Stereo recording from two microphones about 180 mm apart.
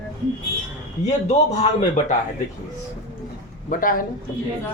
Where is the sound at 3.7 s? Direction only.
50° left (ahead or behind).